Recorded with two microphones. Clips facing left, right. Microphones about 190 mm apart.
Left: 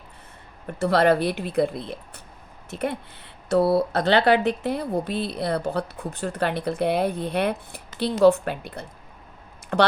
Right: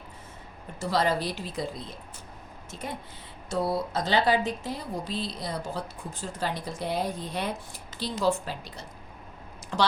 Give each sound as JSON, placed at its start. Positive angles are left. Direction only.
{"t": 0.8, "sound": "speech", "side_deg": 60}